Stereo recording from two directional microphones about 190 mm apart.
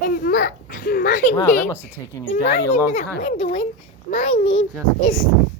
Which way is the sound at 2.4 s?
65° left (ahead or behind).